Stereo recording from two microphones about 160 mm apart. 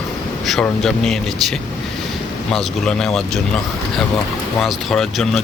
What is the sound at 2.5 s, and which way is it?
Speech, 5° left (ahead or behind).